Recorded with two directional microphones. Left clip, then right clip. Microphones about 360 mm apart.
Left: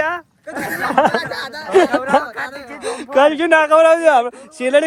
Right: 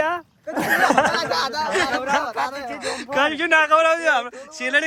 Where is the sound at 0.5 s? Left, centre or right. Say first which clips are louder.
Right 1 dB; left.